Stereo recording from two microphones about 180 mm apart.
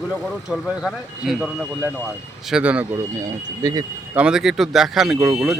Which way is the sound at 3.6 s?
20° right (ahead or behind).